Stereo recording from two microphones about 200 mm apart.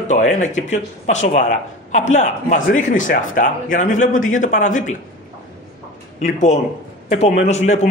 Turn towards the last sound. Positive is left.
turn(degrees=35)  # may be behind; listen again after turning